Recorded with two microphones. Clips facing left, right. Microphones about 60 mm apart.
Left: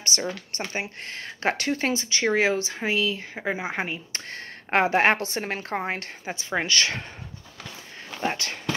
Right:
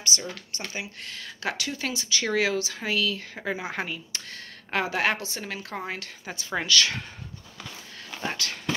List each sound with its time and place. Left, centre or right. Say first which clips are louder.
0.0 s speech: left 3 dB; left
6.2 s speech: left 2 dB; left
8.3 s speech: left 3 dB; left